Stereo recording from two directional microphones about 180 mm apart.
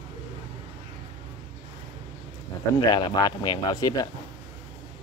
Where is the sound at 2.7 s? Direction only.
25° left (ahead or behind).